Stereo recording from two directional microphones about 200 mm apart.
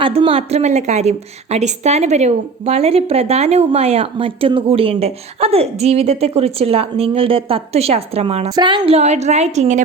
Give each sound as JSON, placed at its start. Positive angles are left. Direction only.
{"t": 0.0, "sound": "a woman's voice", "side_deg": -25}